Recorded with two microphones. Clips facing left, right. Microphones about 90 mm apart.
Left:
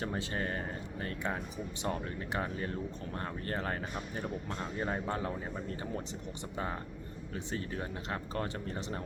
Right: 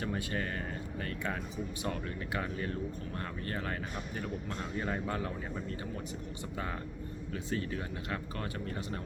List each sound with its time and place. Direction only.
0.0 s speech: 25° left (ahead or behind)
7.3 s speech: 30° left (ahead or behind)